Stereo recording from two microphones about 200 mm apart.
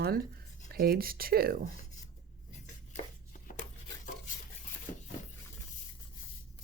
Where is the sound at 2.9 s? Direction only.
40° left (ahead or behind).